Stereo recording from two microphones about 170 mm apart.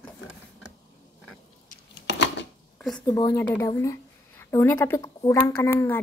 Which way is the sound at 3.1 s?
25° left (ahead or behind).